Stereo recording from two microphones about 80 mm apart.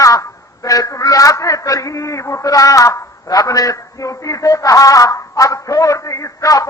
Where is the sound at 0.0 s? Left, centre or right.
Left.